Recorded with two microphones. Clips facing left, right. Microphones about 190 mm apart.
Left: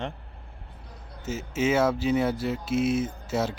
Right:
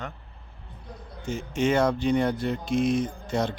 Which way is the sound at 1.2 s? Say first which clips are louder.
Right 1 dB; 5° left (ahead or behind).